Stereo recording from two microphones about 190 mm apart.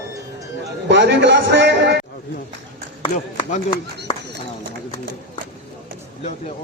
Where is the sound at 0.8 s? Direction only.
65° right (ahead or behind).